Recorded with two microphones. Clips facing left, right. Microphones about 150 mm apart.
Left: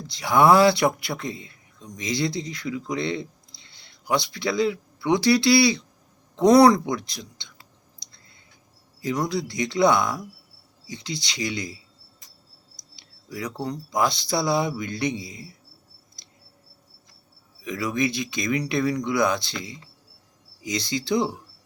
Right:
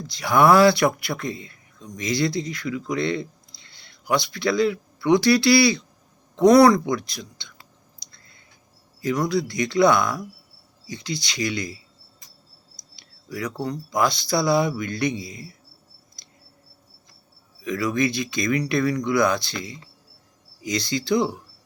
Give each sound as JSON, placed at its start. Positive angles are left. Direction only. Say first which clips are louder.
{"t": 0.1, "sound": "speech", "louder": "right 1 dB", "side_deg": 20}
{"t": 9.0, "sound": "speech", "louder": "right 3 dB", "side_deg": 20}
{"t": 13.0, "sound": "speech", "louder": "right 2 dB", "side_deg": 20}
{"t": 17.6, "sound": "speech", "louder": "right 3 dB", "side_deg": 20}